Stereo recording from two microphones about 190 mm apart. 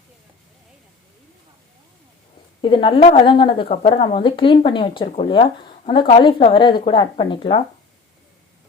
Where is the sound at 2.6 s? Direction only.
25° left (ahead or behind).